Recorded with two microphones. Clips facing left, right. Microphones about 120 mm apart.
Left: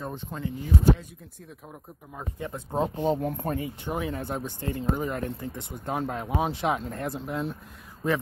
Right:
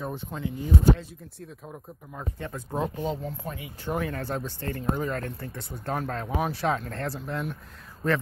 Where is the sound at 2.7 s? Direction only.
30° left (ahead or behind).